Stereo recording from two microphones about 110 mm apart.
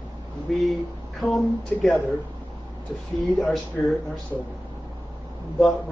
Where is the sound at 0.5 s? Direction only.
5° left (ahead or behind).